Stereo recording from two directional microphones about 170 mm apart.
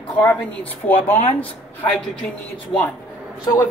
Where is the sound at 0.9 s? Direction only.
35° left (ahead or behind).